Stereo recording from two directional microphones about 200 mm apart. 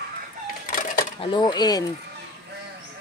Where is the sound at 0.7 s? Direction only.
40° left (ahead or behind).